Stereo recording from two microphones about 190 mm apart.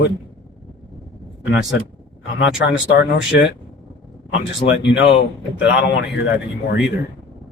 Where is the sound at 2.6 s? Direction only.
70° left (ahead or behind).